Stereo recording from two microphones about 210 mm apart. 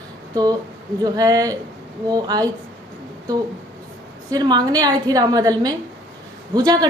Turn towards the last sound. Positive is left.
turn(degrees=-20)  # may be behind; listen again after turning